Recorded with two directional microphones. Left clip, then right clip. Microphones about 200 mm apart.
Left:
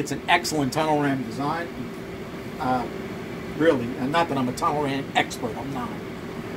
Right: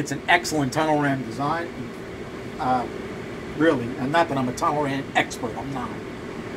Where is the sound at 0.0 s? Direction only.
25° left (ahead or behind).